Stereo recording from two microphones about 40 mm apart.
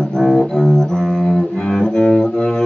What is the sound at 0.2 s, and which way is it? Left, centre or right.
Music, centre.